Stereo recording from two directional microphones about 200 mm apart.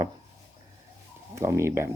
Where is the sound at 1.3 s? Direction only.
15° right (ahead or behind).